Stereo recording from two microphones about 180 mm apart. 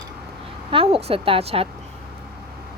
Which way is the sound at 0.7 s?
30° right (ahead or behind).